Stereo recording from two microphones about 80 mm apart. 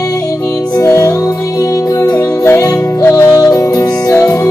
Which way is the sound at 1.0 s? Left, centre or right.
Left.